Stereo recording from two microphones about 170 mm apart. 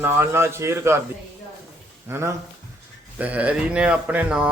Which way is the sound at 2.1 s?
15° right (ahead or behind).